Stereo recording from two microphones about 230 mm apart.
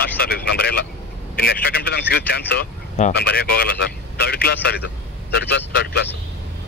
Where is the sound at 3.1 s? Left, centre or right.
Left.